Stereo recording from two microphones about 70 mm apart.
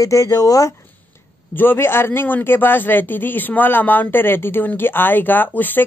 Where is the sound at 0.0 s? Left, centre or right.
Left.